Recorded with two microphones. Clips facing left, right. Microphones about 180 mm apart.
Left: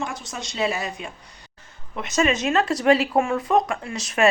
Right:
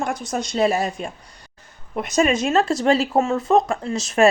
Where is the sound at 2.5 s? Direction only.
30° right (ahead or behind).